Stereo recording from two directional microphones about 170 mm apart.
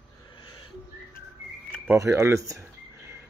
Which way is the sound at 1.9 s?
15° right (ahead or behind).